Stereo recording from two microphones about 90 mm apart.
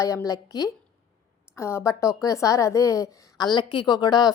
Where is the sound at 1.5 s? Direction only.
30° left (ahead or behind).